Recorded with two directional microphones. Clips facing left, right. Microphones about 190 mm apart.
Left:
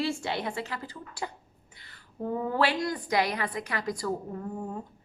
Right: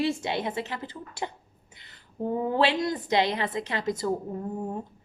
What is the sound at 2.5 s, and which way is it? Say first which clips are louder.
A woman's voice: right 2 dB; 20° right (ahead or behind).